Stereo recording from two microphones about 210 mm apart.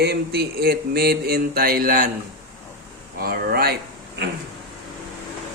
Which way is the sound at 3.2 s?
45° right (ahead or behind).